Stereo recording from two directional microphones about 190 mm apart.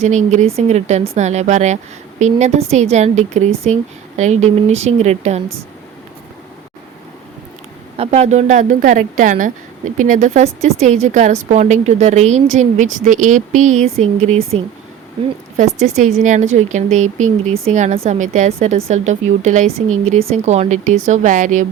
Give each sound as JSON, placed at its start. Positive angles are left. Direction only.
{"t": 0.0, "sound": "a woman's voice", "side_deg": -40}
{"t": 7.9, "sound": "a woman's voice", "side_deg": -35}
{"t": 18.8, "sound": "speech", "side_deg": -90}
{"t": 19.0, "sound": "a woman's voice", "side_deg": -40}